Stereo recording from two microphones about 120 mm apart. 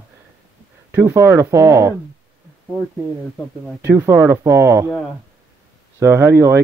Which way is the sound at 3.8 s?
20° right (ahead or behind).